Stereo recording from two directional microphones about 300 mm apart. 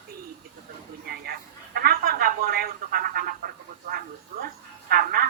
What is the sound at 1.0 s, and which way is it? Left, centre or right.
A man's voice, right.